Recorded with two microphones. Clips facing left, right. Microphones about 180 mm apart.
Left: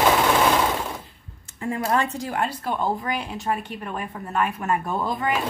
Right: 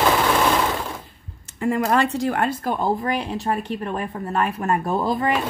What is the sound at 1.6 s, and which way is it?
Speech, 75° right (ahead or behind).